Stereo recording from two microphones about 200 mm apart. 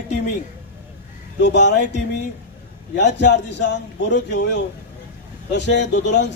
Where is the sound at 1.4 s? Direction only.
60° left (ahead or behind).